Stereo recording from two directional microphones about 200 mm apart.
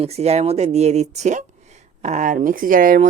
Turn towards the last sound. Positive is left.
turn(degrees=-45)  # may be behind; listen again after turning